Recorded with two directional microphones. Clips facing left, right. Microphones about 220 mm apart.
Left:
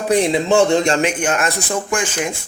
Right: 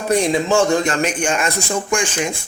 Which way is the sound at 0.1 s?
20° left (ahead or behind).